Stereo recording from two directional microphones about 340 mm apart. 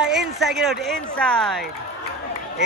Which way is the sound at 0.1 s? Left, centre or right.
Centre.